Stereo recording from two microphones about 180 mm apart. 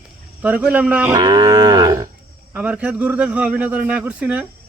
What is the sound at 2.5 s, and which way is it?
Speech, 10° right (ahead or behind).